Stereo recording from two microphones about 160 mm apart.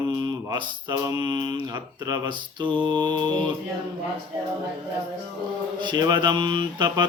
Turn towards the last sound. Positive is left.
turn(degrees=-30)  # may be behind; listen again after turning